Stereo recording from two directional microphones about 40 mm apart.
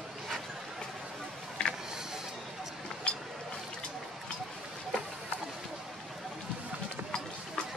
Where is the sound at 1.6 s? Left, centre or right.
Left.